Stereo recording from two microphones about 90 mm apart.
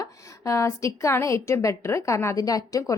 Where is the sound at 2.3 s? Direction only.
45° left (ahead or behind).